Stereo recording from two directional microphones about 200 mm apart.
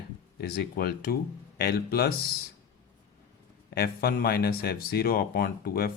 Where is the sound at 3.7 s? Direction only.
50° left (ahead or behind).